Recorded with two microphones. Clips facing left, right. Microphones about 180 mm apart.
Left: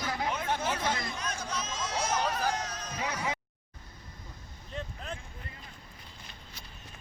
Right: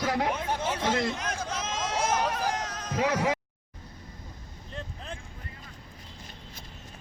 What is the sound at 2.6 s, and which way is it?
Music, 90° right.